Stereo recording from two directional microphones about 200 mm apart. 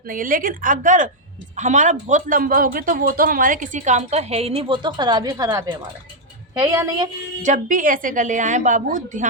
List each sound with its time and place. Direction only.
0.1 s a woman's voice: 45° right (ahead or behind); by 7.1 s 20° right (ahead or behind)
7.4 s speech: 40° right (ahead or behind)